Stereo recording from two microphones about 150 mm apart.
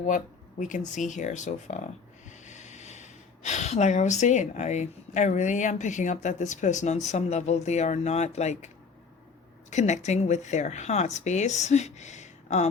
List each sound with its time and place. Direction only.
0.9 s speech: 55° left (ahead or behind)